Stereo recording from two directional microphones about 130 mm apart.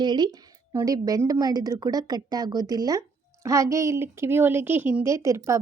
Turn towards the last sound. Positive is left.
turn(degrees=-25)  # may be behind; listen again after turning